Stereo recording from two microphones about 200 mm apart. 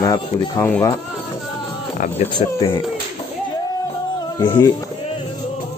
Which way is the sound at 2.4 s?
25° left (ahead or behind).